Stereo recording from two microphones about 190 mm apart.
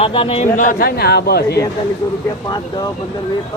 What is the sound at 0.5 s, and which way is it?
Speech, 45° left (ahead or behind).